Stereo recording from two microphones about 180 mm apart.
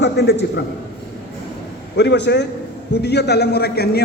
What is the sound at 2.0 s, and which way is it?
A man's voice, 70° left (ahead or behind).